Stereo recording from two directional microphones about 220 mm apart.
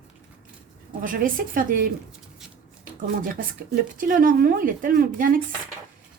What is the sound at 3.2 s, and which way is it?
Speech, 40° right (ahead or behind).